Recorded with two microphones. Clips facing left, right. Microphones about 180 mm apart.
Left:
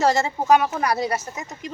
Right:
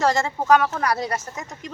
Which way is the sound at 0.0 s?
5° left (ahead or behind).